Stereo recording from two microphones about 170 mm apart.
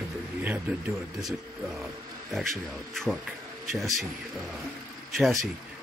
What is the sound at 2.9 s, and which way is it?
Speech, 5° left (ahead or behind).